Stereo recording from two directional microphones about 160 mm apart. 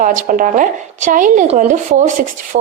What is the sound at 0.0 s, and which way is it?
A woman's voice, 55° right (ahead or behind).